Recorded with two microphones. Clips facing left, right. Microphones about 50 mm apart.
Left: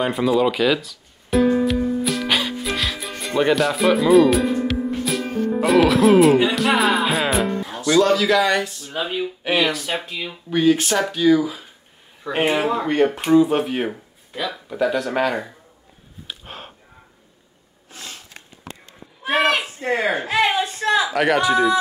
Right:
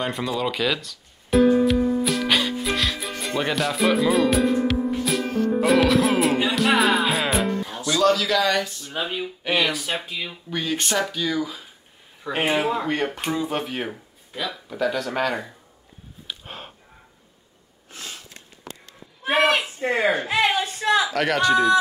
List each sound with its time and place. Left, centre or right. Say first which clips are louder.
0.0 s music: left 7 dB; centre
7.9 s speech: left 4 dB; centre
16.3 s a sound: left 1 dB; centre
18.3 s a sound: left 2 dB; left
19.3 s a woman's voice: left 1 dB; centre
19.8 s speech: even; centre
20.3 s speech: left 2 dB; centre